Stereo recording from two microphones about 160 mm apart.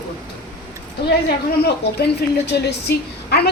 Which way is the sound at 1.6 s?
90° left.